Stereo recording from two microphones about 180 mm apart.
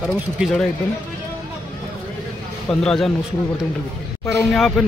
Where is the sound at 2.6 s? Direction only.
5° left (ahead or behind).